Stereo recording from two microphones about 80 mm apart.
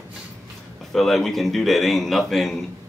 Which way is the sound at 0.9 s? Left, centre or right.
Centre.